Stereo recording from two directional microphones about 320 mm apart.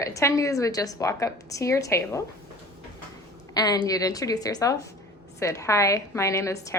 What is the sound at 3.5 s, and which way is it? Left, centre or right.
A woman's voice, centre.